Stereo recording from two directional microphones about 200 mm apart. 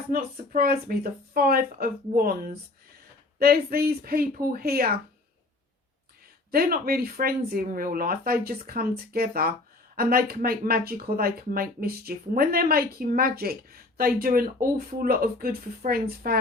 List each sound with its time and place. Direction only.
0.1 s speech: 50° right (ahead or behind)
6.5 s speech: 50° right (ahead or behind)